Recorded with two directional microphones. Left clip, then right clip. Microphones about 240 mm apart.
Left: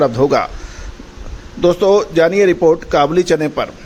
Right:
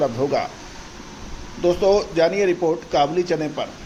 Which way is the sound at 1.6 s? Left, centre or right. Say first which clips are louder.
Left 6 dB; left.